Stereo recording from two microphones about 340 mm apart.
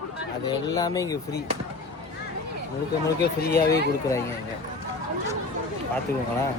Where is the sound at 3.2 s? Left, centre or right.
Left.